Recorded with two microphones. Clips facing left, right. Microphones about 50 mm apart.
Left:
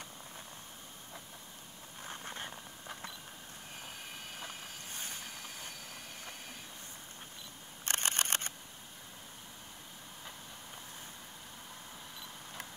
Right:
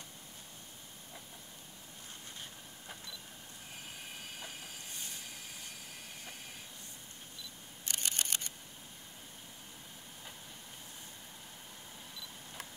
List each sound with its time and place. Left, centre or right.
2.0 s vehicle: left
7.8 s camera: left